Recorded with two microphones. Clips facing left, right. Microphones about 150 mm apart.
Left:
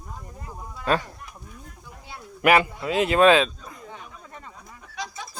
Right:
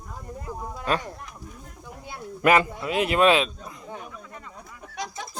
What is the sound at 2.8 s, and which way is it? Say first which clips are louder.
Speech: left 2 dB; 30° left (ahead or behind).